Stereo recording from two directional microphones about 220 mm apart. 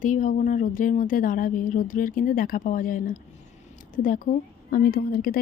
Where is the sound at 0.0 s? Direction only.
35° left (ahead or behind).